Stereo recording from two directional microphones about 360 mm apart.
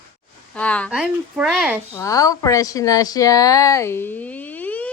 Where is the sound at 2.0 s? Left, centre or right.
Centre.